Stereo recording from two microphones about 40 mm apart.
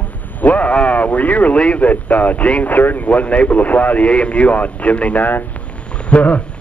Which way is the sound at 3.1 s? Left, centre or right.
Left.